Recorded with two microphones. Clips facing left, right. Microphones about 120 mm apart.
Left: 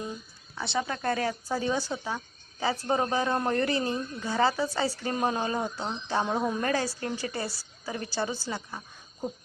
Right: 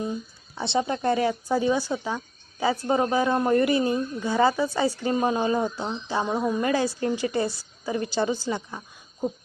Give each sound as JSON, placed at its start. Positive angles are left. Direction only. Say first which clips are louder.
{"t": 0.5, "sound": "a woman's voice", "louder": "right 5 dB", "side_deg": -25}
{"t": 6.3, "sound": "speech", "louder": "right 3 dB", "side_deg": 0}
{"t": 6.6, "sound": "a woman's voice", "louder": "right 5 dB", "side_deg": -15}